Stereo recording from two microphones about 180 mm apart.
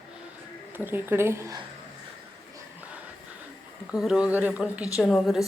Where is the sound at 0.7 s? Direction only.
10° right (ahead or behind).